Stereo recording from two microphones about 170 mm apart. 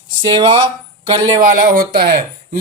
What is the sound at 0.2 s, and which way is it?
Speech, 25° right (ahead or behind).